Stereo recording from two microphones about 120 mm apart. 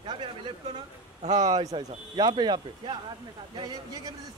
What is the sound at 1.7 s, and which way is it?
Speech, 40° right (ahead or behind).